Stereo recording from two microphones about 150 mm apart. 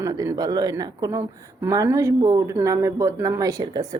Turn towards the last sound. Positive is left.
turn(degrees=-25)  # may be behind; listen again after turning